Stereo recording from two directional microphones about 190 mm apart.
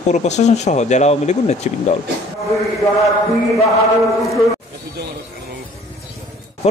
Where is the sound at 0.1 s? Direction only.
35° left (ahead or behind).